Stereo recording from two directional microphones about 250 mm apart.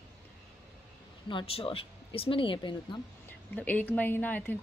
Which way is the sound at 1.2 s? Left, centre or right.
Left.